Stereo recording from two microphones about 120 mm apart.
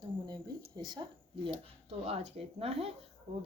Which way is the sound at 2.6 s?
55° right (ahead or behind).